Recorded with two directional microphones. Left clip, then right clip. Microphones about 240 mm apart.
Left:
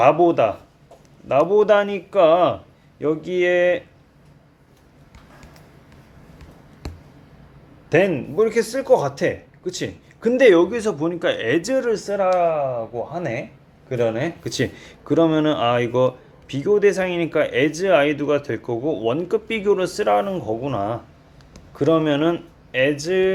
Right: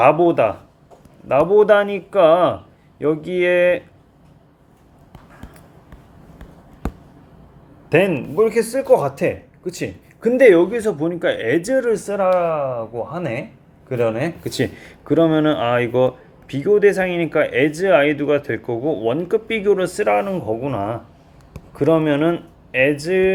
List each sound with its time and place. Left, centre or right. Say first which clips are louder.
0.0 s speech: right 1 dB; centre
7.9 s speech: right 1 dB; centre